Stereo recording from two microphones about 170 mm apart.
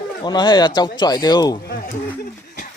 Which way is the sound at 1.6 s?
60° left (ahead or behind).